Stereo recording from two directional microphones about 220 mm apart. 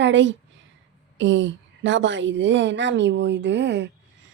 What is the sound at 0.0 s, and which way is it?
A woman's voice, 55° right (ahead or behind).